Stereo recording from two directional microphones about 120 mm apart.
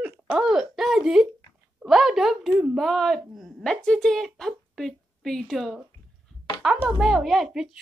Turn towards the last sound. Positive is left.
turn(degrees=0)  # may be behind; listen again after turning